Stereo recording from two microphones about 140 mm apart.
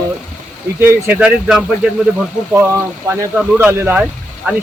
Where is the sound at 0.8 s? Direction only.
15° right (ahead or behind).